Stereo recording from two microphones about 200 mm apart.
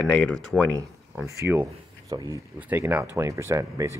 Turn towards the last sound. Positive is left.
turn(degrees=-15)  # may be behind; listen again after turning